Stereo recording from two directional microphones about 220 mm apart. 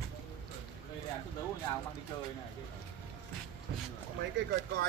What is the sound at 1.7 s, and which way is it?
Speech, 15° left (ahead or behind).